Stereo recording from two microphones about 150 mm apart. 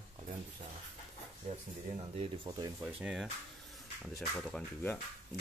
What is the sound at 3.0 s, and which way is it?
Speech, 5° right (ahead or behind).